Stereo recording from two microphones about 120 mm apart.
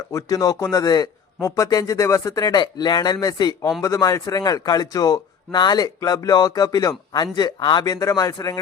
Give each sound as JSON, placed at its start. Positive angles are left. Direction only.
{"t": 0.1, "sound": "a man's voice", "side_deg": 30}
{"t": 7.9, "sound": "a man's voice", "side_deg": 30}